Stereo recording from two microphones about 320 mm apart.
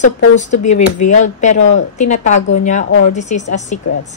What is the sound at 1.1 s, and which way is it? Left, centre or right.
A woman's voice, left.